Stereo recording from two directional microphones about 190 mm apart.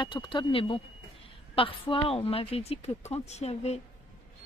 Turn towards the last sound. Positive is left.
turn(degrees=35)  # may be behind; listen again after turning